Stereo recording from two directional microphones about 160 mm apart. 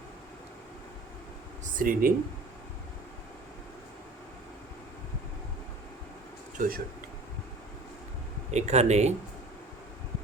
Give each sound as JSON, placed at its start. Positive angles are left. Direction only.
{"t": 1.7, "sound": "speech", "side_deg": -60}
{"t": 6.6, "sound": "speech", "side_deg": -65}
{"t": 8.4, "sound": "speech", "side_deg": -45}